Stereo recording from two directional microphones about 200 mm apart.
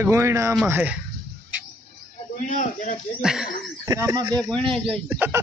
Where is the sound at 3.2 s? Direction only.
5° right (ahead or behind).